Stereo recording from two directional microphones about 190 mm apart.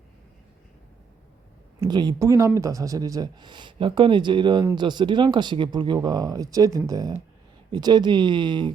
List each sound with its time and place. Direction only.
1.8 s speech: 20° right (ahead or behind)